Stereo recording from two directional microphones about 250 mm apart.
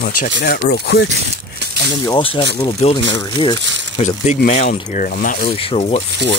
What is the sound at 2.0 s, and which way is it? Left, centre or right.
Speech, centre.